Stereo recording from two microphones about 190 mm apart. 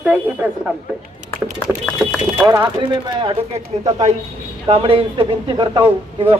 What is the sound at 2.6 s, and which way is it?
Speech, 25° right (ahead or behind).